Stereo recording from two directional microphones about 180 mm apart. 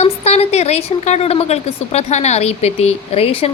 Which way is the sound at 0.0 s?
35° left (ahead or behind).